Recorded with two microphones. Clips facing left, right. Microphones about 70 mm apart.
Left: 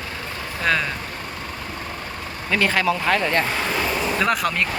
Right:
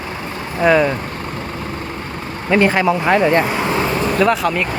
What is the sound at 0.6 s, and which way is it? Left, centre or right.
Speech, centre.